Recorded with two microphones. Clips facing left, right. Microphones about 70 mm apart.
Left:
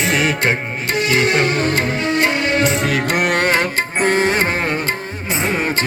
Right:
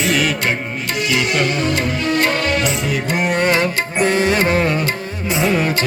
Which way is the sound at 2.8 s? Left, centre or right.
Left.